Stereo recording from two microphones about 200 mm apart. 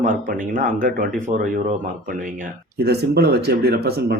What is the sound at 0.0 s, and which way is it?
Speech, 40° right (ahead or behind).